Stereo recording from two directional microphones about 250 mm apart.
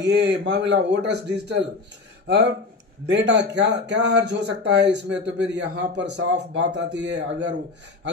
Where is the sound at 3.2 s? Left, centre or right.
Right.